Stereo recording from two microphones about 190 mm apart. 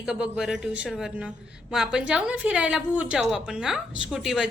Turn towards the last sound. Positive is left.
turn(degrees=0)  # may be behind; listen again after turning